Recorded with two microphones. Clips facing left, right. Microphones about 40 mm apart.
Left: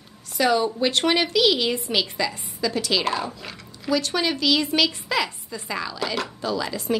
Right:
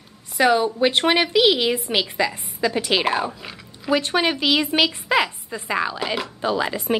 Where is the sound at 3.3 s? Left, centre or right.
Centre.